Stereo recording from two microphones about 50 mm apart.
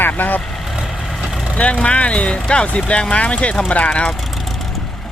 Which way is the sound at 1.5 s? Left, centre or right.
Left.